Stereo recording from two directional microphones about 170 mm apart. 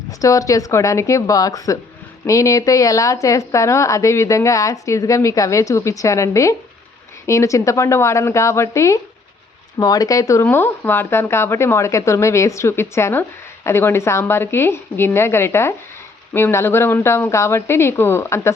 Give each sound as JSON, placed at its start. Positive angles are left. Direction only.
{"t": 0.2, "sound": "a woman's voice", "side_deg": 20}